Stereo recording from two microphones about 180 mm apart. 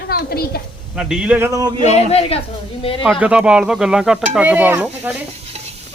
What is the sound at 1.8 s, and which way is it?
Speech, 35° left (ahead or behind).